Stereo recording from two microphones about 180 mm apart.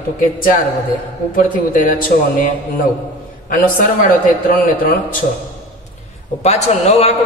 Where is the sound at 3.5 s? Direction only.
50° left (ahead or behind).